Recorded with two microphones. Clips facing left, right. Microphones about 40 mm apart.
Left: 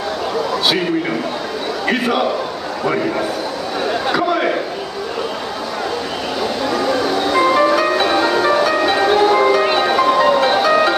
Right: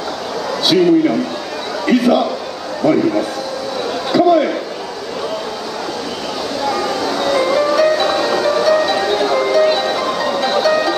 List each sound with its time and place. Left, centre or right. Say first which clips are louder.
0.7 s a man's voice: right 10 dB; centre
4.1 s a sound: right 7 dB; left
7.3 s music: left 1 dB; left